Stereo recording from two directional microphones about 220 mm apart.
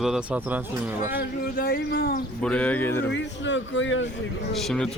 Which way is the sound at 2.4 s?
5° left (ahead or behind).